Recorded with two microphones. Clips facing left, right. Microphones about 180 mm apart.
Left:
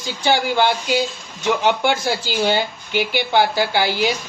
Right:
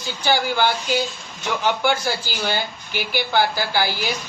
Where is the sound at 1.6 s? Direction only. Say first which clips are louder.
Even; 25° left (ahead or behind).